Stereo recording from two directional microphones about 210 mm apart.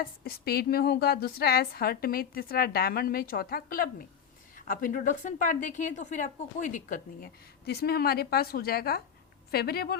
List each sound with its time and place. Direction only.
0.0 s a woman's voice: 45° left (ahead or behind)